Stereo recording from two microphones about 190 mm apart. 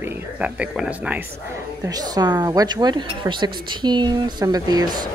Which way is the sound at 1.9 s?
20° right (ahead or behind).